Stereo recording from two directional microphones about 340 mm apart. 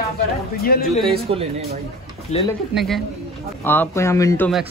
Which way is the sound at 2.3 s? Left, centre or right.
Centre.